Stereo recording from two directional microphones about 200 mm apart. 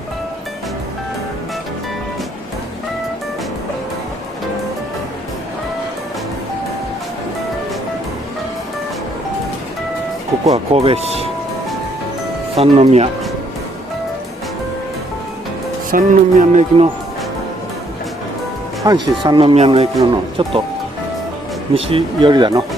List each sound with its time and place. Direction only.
10.4 s speech: 30° right (ahead or behind)
12.5 s speech: 30° right (ahead or behind)
15.9 s speech: 40° right (ahead or behind)
18.9 s speech: 25° right (ahead or behind)
21.7 s speech: 30° right (ahead or behind)